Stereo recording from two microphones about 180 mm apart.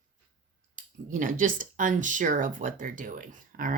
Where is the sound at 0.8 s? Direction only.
45° right (ahead or behind).